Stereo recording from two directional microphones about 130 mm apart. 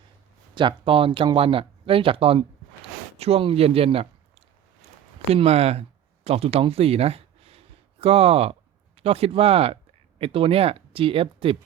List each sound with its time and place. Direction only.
0.5 s speech: 40° right (ahead or behind)
3.2 s a sound: 50° right (ahead or behind)
5.3 s speech: 50° right (ahead or behind)